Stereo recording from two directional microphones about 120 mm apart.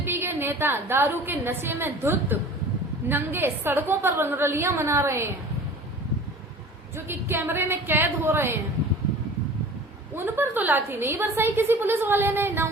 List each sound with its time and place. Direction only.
0.0 s a woman's voice: 20° right (ahead or behind)
6.9 s a woman's voice: 20° right (ahead or behind)
10.2 s a woman's voice: 20° right (ahead or behind)